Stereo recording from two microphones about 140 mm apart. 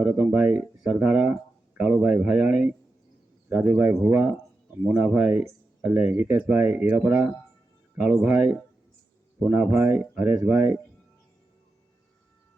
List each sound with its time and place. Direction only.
0.0 s speech: 10° right (ahead or behind)